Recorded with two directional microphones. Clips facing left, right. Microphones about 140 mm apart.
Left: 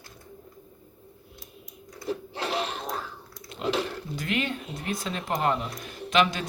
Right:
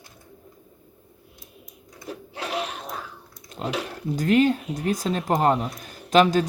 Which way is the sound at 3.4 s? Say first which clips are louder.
Left 1 dB; 40° right (ahead or behind).